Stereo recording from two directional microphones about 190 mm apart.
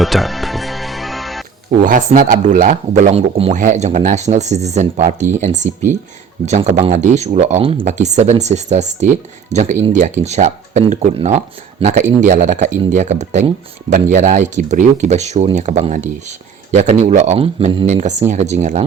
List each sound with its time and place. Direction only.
0.0 s music: centre (ahead or behind)
1.8 s speech: 45° right (ahead or behind)